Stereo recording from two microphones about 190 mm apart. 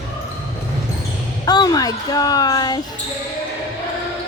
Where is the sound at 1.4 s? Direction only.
20° left (ahead or behind).